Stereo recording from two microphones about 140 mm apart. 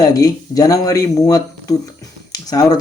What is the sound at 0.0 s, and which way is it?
A man's voice, 25° left (ahead or behind).